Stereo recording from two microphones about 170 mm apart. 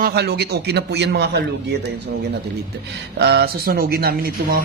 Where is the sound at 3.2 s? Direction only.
75° right (ahead or behind).